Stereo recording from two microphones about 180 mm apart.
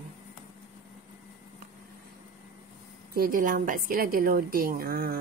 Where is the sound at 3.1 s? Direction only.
55° right (ahead or behind).